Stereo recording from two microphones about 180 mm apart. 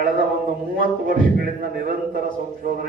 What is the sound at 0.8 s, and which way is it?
A man's voice, 50° right (ahead or behind).